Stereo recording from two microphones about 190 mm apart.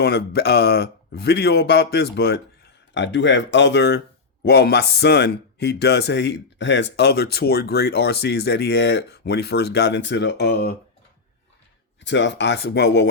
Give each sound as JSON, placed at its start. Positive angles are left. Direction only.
{"t": 0.0, "sound": "speech", "side_deg": 60}
{"t": 2.9, "sound": "speech", "side_deg": 70}
{"t": 12.0, "sound": "speech", "side_deg": 70}